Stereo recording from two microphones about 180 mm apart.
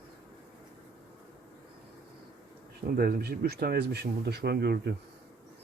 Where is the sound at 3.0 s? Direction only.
55° right (ahead or behind).